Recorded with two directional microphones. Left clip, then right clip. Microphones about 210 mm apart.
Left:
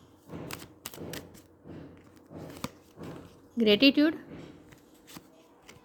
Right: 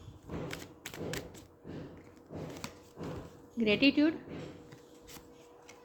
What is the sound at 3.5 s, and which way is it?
Speech, 45° left (ahead or behind).